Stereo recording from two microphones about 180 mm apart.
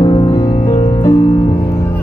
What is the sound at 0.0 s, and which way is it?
Music, 25° left (ahead or behind).